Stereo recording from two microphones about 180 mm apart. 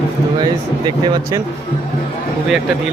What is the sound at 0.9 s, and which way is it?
Speech, 25° right (ahead or behind).